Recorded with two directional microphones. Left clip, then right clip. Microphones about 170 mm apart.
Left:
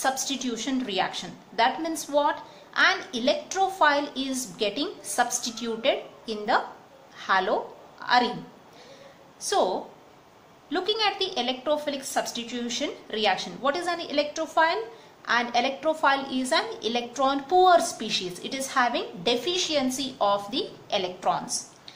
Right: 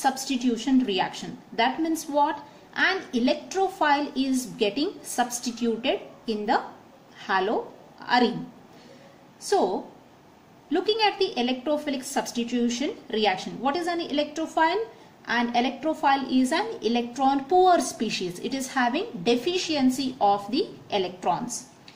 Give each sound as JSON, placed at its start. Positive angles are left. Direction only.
{"t": 0.0, "sound": "a woman's voice", "side_deg": -25}
{"t": 10.7, "sound": "a woman's voice", "side_deg": -25}